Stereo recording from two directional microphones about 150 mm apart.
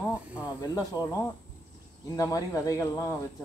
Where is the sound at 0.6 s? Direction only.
25° left (ahead or behind).